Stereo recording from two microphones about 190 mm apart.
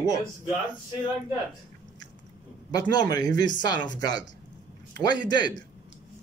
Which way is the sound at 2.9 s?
20° left (ahead or behind).